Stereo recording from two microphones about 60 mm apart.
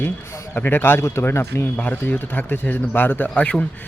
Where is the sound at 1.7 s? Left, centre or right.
Left.